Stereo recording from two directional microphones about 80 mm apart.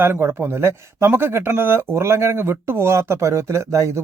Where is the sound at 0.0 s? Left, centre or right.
Right.